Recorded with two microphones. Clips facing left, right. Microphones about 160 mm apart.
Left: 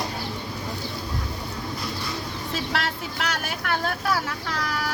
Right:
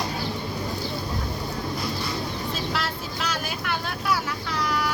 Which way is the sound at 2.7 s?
65° left (ahead or behind).